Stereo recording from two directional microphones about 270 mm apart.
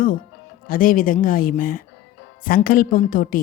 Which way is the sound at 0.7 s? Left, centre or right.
Left.